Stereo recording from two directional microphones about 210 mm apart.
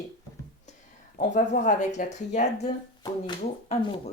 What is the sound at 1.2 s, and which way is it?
Speech, 35° left (ahead or behind).